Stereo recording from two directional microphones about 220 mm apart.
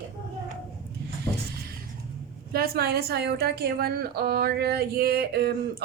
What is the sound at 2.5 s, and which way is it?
A woman's voice, 45° right (ahead or behind).